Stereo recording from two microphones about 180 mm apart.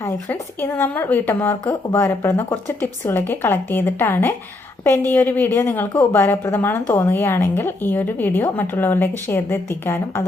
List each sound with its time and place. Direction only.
0.0 s a woman's voice: 15° left (ahead or behind)